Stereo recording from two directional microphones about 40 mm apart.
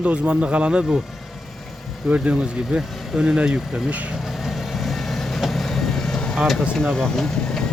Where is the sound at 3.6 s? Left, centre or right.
Centre.